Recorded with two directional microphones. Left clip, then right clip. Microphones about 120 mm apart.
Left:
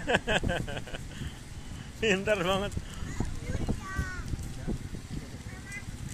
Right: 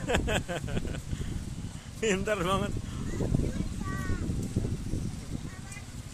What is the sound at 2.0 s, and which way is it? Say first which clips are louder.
Speech: left 2 dB; 15° right (ahead or behind).